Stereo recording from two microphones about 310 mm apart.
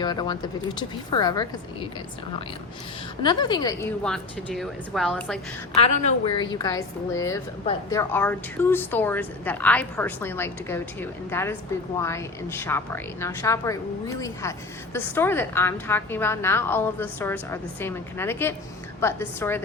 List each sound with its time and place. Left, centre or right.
0.0 s a woman's voice: centre
3.2 s a woman's voice: centre
5.8 s a woman's voice: left; by 19.6 s centre